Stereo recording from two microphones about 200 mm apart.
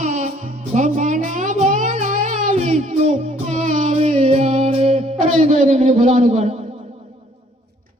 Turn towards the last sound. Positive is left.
turn(degrees=-35)  # may be behind; listen again after turning